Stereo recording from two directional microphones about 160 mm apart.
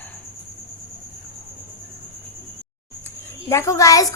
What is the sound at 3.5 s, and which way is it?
Speech, 20° left (ahead or behind).